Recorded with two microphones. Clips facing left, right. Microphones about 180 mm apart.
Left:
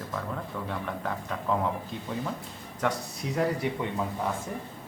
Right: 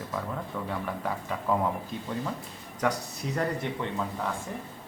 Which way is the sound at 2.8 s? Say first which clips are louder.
Right 1 dB; centre (ahead or behind).